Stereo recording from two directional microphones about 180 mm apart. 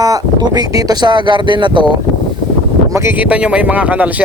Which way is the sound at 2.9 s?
15° right (ahead or behind).